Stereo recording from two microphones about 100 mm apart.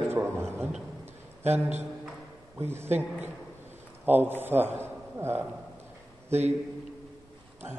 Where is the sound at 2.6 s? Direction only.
25° right (ahead or behind).